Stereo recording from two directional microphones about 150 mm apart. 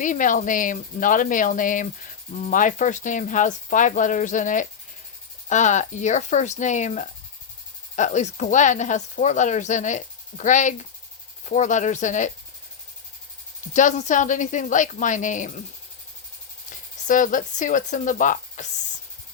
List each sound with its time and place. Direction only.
0.0 s speech: 60° left (ahead or behind)
13.7 s speech: 55° left (ahead or behind)
17.1 s speech: 60° left (ahead or behind)